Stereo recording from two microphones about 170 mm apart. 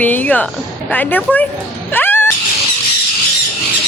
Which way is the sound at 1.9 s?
10° left (ahead or behind).